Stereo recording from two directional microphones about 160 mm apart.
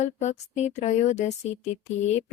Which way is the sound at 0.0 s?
45° left (ahead or behind).